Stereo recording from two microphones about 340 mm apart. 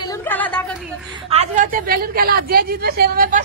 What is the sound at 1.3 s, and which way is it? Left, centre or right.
A woman's voice, right.